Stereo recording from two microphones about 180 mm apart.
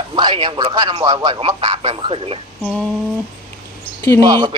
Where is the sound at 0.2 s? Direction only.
25° right (ahead or behind).